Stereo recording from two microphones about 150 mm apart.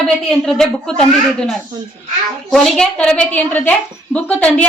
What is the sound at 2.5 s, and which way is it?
A woman's voice, 5° left (ahead or behind).